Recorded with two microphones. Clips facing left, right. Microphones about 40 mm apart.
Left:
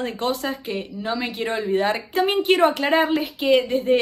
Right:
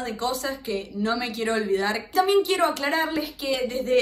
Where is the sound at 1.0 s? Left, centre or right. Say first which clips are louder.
Even; centre.